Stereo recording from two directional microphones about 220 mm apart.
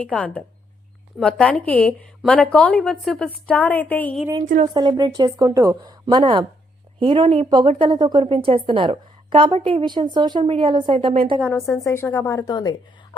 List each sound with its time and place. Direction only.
0.0 s a woman's voice: 5° left (ahead or behind)
4.6 s a woman's voice: 20° right (ahead or behind)
11.3 s a woman's voice: 5° left (ahead or behind)